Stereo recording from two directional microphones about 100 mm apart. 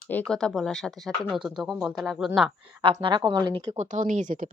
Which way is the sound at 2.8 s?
55° right (ahead or behind).